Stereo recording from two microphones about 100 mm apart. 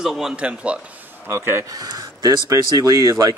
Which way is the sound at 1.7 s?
40° right (ahead or behind).